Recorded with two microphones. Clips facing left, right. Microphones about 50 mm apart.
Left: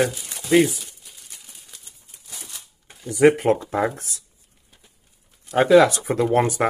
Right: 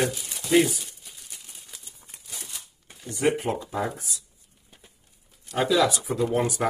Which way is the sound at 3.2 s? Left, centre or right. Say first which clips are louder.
Left 9 dB; left.